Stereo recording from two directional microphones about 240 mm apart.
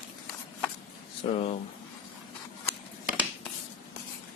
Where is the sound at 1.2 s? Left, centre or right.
Left.